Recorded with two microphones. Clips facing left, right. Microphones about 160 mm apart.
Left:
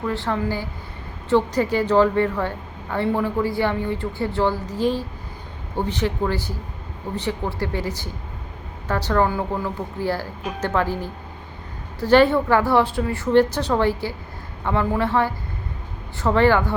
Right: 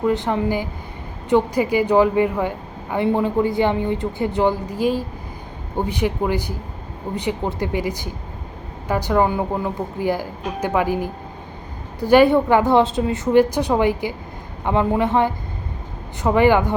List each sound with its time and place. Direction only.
0.0 s a woman's voice: 20° right (ahead or behind)